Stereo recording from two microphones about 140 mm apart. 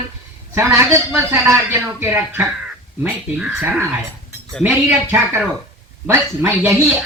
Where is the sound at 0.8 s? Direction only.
15° right (ahead or behind).